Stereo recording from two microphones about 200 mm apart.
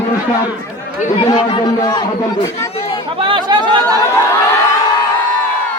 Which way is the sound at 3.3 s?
20° right (ahead or behind).